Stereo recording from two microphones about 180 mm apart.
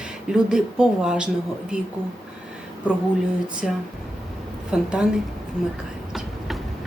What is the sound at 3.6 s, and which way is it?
Speech, centre (ahead or behind).